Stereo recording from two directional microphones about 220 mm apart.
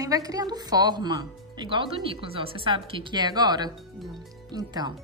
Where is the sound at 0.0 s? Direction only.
15° right (ahead or behind).